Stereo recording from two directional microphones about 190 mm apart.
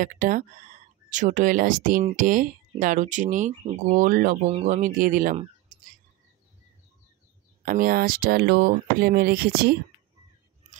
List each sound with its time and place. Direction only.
0.0 s speech: 45° right (ahead or behind)
5.7 s bird: 45° right (ahead or behind)
7.6 s speech: 50° right (ahead or behind)